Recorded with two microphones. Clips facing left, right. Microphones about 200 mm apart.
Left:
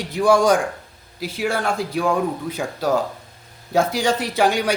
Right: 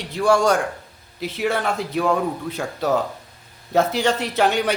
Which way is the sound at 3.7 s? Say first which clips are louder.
Even; 10° left (ahead or behind).